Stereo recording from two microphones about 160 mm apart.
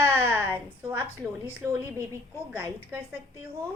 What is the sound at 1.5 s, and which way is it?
A woman's voice, 15° right (ahead or behind).